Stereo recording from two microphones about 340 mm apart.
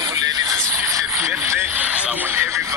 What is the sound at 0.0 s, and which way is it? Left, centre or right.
Radio, centre.